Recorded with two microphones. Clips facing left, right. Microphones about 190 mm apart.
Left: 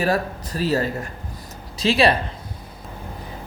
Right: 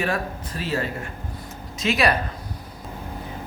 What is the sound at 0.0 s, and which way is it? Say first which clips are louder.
Speech: left 4 dB; 40° left (ahead or behind).